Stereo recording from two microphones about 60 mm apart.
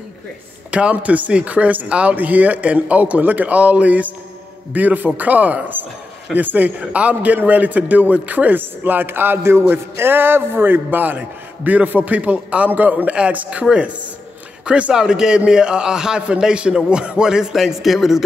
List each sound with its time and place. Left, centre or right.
0.7 s a man's voice: centre